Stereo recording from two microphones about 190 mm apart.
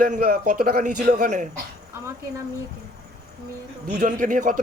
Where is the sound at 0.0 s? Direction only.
45° right (ahead or behind).